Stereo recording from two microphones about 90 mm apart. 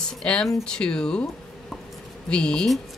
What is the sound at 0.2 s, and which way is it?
A woman's voice, 10° left (ahead or behind).